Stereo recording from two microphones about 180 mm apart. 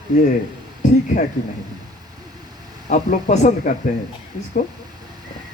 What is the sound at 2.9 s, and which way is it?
Speech, 40° left (ahead or behind).